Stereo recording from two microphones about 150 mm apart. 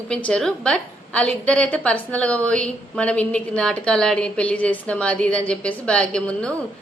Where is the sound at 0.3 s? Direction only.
5° left (ahead or behind).